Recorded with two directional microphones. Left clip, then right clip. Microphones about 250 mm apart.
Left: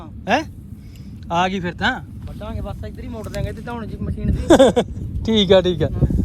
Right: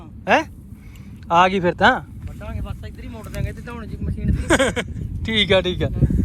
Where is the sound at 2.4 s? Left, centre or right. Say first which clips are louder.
Left 5 dB; left.